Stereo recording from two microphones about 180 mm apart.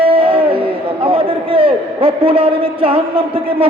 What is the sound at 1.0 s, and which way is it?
A man's voice, 30° right (ahead or behind).